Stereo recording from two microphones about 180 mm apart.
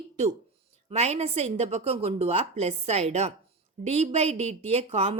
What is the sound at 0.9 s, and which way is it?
A woman's voice, 35° right (ahead or behind).